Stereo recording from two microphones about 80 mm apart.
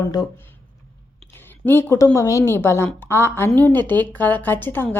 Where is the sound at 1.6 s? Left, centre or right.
Left.